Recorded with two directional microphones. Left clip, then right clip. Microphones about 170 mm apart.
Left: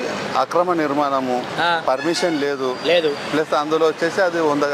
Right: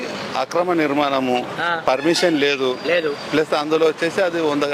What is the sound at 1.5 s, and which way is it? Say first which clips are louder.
Speech: left 3 dB; centre (ahead or behind).